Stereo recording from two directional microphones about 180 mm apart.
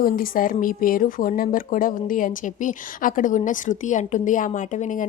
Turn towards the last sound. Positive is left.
turn(degrees=45)  # may be behind; listen again after turning